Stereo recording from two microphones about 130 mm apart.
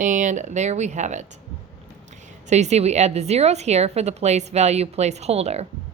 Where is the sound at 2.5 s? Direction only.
60° right (ahead or behind).